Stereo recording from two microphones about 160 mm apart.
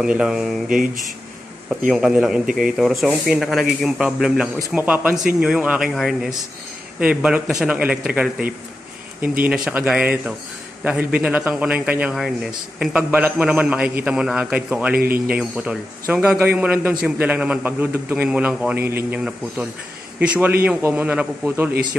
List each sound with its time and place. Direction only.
0.0 s speech: 5° right (ahead or behind)
1.9 s a man's voice: centre (ahead or behind)
15.0 s speech: 70° right (ahead or behind)
15.3 s a man's voice: 5° right (ahead or behind)